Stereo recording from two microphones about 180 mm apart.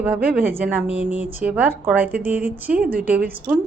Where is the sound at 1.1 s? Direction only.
40° left (ahead or behind).